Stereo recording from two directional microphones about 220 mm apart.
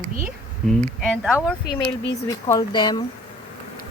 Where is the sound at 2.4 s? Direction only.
20° left (ahead or behind).